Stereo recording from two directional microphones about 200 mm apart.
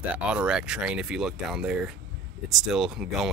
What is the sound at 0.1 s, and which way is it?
Speech, 5° right (ahead or behind).